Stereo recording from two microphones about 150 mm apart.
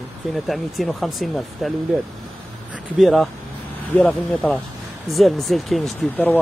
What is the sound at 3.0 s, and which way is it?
Speech, centre (ahead or behind).